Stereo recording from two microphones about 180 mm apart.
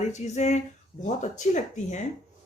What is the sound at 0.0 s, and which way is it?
A woman's voice, 40° left (ahead or behind).